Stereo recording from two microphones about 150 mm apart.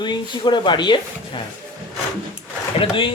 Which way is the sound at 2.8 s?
35° left (ahead or behind).